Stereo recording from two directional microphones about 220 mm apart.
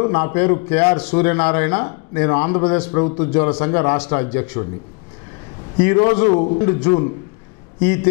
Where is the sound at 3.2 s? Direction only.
10° left (ahead or behind).